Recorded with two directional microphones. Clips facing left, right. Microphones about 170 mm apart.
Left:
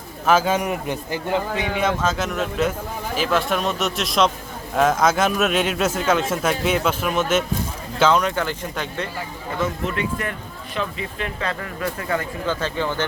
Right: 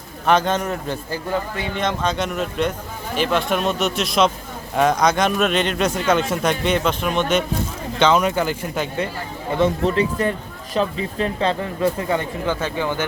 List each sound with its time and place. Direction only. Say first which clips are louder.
0.3 s a man's voice: even; 5° left (ahead or behind)
1.8 s a man's voice: right 1 dB; 5° left (ahead or behind)
9.5 s speech: right 7 dB; 25° right (ahead or behind)